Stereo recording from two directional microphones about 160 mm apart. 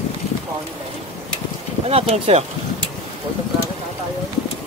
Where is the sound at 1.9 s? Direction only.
40° right (ahead or behind).